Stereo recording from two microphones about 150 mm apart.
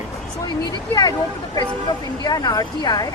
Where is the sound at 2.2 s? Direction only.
25° left (ahead or behind).